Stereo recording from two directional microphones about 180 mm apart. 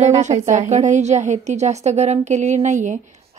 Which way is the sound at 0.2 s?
40° right (ahead or behind).